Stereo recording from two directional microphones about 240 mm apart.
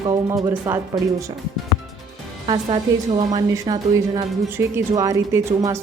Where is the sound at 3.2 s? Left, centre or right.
Centre.